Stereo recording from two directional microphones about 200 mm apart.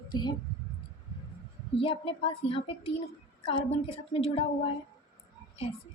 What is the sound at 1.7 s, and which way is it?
Speech, 25° left (ahead or behind).